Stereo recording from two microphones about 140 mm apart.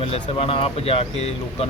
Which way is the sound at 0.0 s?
45° left (ahead or behind).